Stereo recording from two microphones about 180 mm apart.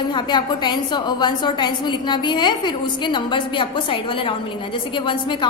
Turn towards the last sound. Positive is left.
turn(degrees=25)  # may be behind; listen again after turning